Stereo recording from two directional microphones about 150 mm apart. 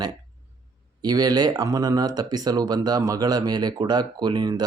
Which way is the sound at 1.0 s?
25° right (ahead or behind).